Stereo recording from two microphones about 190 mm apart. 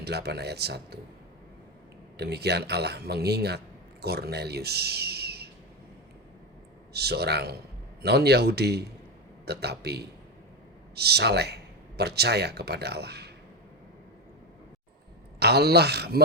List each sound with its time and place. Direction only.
0.0 s a man's voice: 60° right (ahead or behind)
2.1 s a man's voice: 60° right (ahead or behind)
6.9 s a man's voice: 60° right (ahead or behind)
15.4 s a man's voice: 60° right (ahead or behind)